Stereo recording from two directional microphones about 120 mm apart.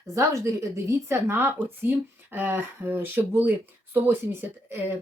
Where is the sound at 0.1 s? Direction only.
25° right (ahead or behind).